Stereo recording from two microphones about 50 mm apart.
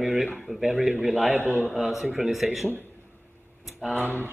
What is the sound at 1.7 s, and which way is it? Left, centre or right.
Speech, centre.